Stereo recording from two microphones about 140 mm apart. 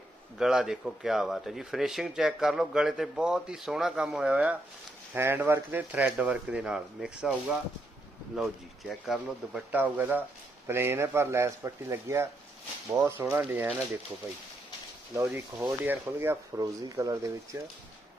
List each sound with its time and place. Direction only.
0.3 s speech: 5° right (ahead or behind)
8.9 s speech: centre (ahead or behind)
15.1 s speech: 15° right (ahead or behind)